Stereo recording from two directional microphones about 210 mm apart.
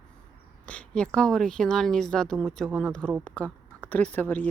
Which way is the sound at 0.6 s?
5° left (ahead or behind).